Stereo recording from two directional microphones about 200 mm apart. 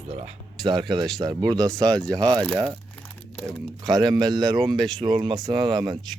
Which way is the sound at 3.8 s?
20° right (ahead or behind).